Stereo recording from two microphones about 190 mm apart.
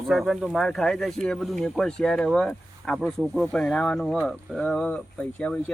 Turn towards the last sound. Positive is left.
turn(degrees=5)  # may be behind; listen again after turning